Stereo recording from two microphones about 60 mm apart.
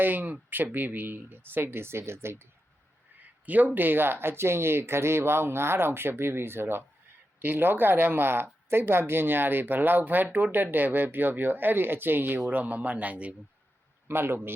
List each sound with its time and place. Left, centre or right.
0.0 s speech: right
3.2 s a sound: right
3.8 s speech: right
14.1 s speech: right